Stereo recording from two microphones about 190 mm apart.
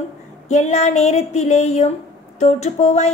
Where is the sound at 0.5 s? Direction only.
35° left (ahead or behind).